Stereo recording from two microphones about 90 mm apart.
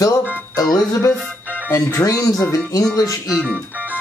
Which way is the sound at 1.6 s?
30° left (ahead or behind).